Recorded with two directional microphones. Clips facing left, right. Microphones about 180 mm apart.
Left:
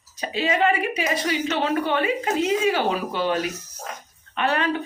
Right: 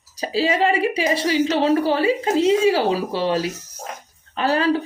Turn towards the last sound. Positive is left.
turn(degrees=-35)  # may be behind; listen again after turning